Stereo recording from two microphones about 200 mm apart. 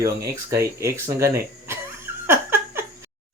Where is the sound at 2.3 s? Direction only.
10° right (ahead or behind).